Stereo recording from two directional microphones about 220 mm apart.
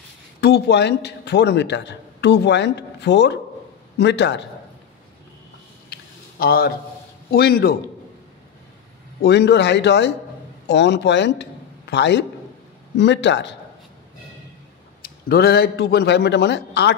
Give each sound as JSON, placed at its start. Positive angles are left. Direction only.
{"t": 0.4, "sound": "a man's voice", "side_deg": 50}
{"t": 6.4, "sound": "a man's voice", "side_deg": 45}
{"t": 9.2, "sound": "a man's voice", "side_deg": 50}
{"t": 15.0, "sound": "a man's voice", "side_deg": 45}